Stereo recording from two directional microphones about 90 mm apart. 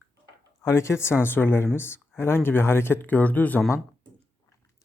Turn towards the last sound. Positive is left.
turn(degrees=20)  # may be behind; listen again after turning